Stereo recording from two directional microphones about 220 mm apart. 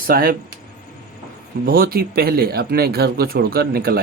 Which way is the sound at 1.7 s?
40° right (ahead or behind).